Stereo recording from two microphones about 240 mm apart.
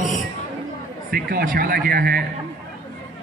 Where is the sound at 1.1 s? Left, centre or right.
Right.